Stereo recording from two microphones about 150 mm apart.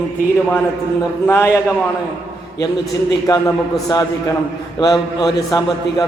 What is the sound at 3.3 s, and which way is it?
A man's voice, 25° left (ahead or behind).